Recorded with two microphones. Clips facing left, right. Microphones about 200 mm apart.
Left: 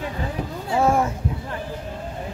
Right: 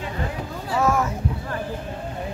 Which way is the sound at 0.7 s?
30° left (ahead or behind).